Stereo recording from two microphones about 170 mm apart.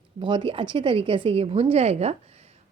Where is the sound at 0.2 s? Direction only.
30° right (ahead or behind).